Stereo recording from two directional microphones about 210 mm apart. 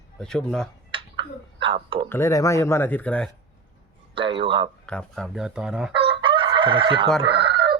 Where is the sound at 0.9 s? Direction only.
25° right (ahead or behind).